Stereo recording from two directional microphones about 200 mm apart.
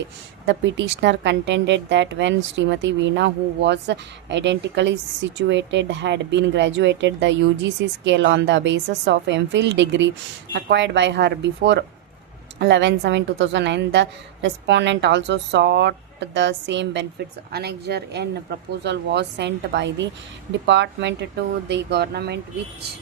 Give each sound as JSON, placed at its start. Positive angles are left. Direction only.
{"t": 0.4, "sound": "speech", "side_deg": -60}